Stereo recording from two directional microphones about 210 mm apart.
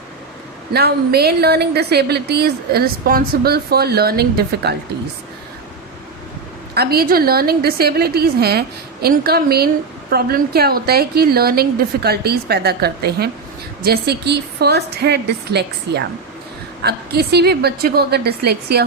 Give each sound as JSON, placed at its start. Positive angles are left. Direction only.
{"t": 0.7, "sound": "a woman's voice", "side_deg": -50}
{"t": 6.7, "sound": "a woman's voice", "side_deg": -45}